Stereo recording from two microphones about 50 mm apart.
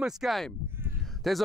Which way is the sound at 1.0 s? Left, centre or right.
Centre.